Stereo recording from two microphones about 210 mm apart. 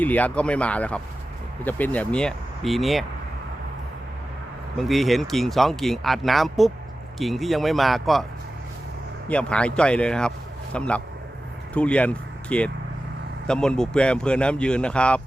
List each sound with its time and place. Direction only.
0.0 s speech: 5° left (ahead or behind)
4.8 s speech: centre (ahead or behind)
9.3 s speech: 5° left (ahead or behind)